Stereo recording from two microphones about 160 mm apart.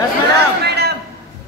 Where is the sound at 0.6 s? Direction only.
90° right.